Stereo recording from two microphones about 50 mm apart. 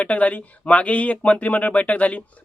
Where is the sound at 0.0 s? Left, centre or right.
Left.